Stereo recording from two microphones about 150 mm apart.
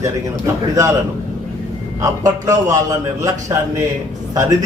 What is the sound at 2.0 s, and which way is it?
A man's voice, 25° right (ahead or behind).